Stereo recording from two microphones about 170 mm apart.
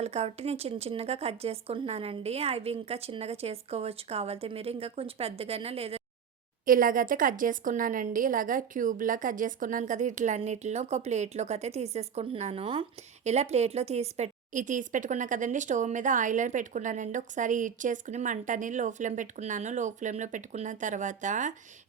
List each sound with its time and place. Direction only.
0.0 s speech: 40° right (ahead or behind)
6.7 s a woman's voice: 55° right (ahead or behind)